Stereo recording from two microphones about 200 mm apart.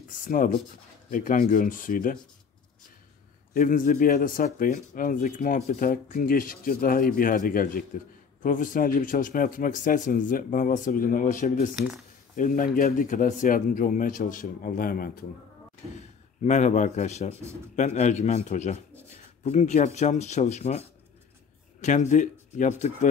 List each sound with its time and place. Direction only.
0.2 s speech: 45° left (ahead or behind)
3.5 s speech: 40° left (ahead or behind)
16.4 s speech: 35° left (ahead or behind)
21.8 s speech: 40° left (ahead or behind)